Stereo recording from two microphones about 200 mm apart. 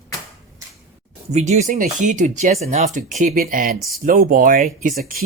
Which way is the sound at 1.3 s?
35° right (ahead or behind).